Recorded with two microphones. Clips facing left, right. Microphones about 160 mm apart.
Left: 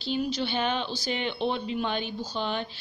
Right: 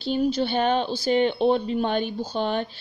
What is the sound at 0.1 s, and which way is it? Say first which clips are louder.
Speech: right 6 dB; 45° right (ahead or behind).